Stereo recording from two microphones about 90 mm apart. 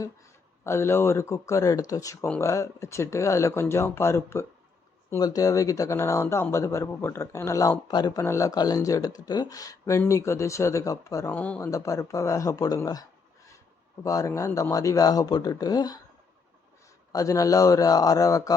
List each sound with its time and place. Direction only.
0.6 s speech: 30° left (ahead or behind)
7.9 s speech: 50° left (ahead or behind)
8.2 s speech: 30° left (ahead or behind)
11.3 s speech: 15° left (ahead or behind)
11.6 s speech: 35° left (ahead or behind)
17.1 s speech: 40° left (ahead or behind)